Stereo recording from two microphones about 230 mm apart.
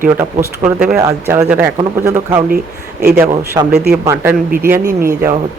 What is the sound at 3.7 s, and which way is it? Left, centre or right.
Speech, right.